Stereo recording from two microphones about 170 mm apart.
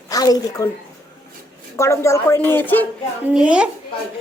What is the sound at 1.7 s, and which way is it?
A woman's voice, 15° left (ahead or behind).